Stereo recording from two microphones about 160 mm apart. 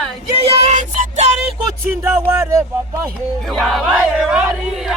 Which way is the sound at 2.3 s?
20° right (ahead or behind).